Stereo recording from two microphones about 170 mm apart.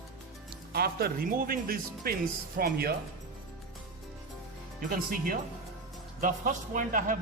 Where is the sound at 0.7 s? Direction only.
65° right (ahead or behind).